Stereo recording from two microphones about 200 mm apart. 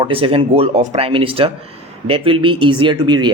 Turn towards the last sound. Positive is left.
turn(degrees=-20)  # may be behind; listen again after turning